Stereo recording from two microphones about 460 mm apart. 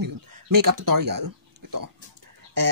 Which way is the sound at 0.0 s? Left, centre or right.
Right.